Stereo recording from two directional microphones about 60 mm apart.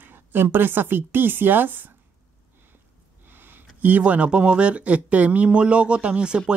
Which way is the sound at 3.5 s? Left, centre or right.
Right.